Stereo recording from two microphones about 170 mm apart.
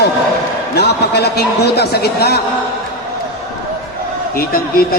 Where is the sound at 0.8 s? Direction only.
75° left (ahead or behind).